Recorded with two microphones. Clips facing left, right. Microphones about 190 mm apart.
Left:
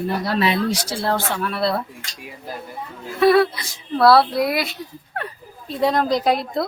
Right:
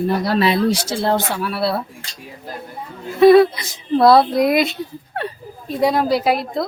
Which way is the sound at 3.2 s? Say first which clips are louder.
Right 6 dB; 20° right (ahead or behind).